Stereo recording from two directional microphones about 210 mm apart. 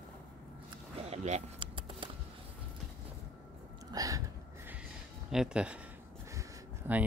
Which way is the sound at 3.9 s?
15° right (ahead or behind).